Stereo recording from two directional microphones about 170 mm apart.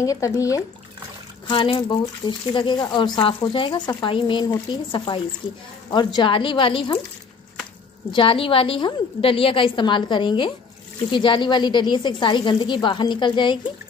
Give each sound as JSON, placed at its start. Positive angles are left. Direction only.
{"t": 0.0, "sound": "a woman's voice", "side_deg": 20}
{"t": 8.1, "sound": "a woman's voice", "side_deg": 30}